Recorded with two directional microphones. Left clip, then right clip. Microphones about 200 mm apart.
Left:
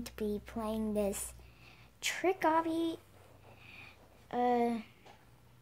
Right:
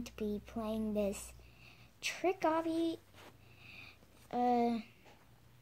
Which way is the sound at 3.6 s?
10° left (ahead or behind).